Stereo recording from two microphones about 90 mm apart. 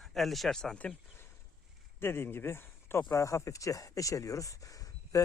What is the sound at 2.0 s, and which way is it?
Speech, 25° left (ahead or behind).